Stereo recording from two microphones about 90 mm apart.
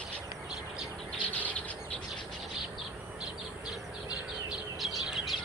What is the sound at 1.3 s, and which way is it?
Owl, 15° left (ahead or behind).